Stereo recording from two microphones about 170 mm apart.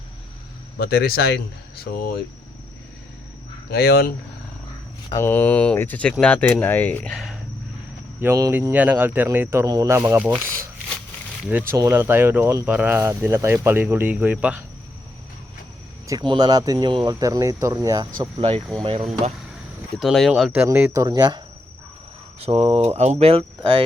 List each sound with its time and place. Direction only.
0.8 s speech: 65° left (ahead or behind)
3.7 s speech: 65° left (ahead or behind)
5.2 s speech: 10° left (ahead or behind)
8.2 s speech: 15° right (ahead or behind)
11.7 s speech: 15° right (ahead or behind)
16.0 s speech: 25° right (ahead or behind)
18.8 s speech: 35° right (ahead or behind)
20.0 s speech: centre (ahead or behind)
20.5 s speech: 10° right (ahead or behind)
22.4 s speech: 35° right (ahead or behind)